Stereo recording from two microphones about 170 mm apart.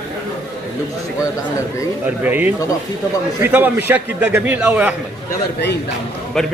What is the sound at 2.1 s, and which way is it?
A man's voice, 10° right (ahead or behind).